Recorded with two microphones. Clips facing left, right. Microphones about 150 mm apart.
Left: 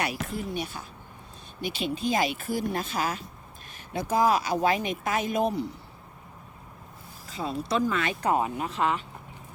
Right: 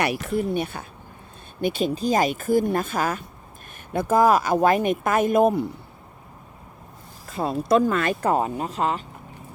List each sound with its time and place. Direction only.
0.0 s speech: 60° right (ahead or behind)
1.6 s speech: 45° right (ahead or behind)
7.3 s speech: 50° right (ahead or behind)